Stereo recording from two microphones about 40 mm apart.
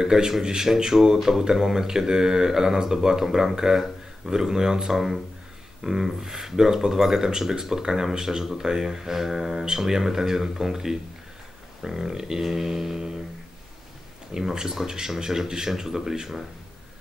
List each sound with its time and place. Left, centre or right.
0.0 s speech: centre
14.3 s speech: centre